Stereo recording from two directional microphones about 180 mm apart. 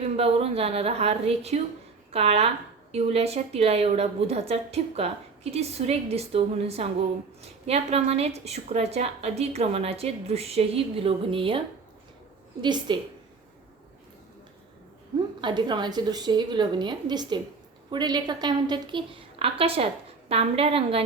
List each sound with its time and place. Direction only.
0.2 s a woman's voice: 35° right (ahead or behind)
12.6 s a woman's voice: 25° right (ahead or behind)
15.4 s a woman's voice: 25° right (ahead or behind)